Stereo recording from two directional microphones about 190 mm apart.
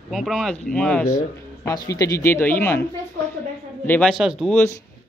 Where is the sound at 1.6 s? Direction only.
20° left (ahead or behind).